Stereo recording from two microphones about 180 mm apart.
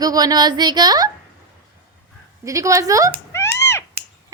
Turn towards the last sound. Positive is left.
turn(degrees=15)  # may be behind; listen again after turning